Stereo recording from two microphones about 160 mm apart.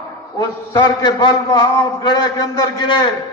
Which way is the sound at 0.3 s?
25° left (ahead or behind).